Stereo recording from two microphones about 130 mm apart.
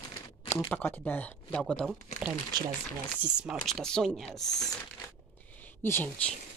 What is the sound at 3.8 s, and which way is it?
Speech, 5° left (ahead or behind).